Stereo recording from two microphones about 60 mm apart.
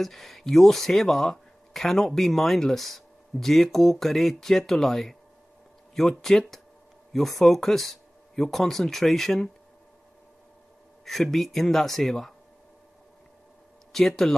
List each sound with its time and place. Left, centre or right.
0.0 s speech: centre
11.1 s speech: centre
13.9 s speech: centre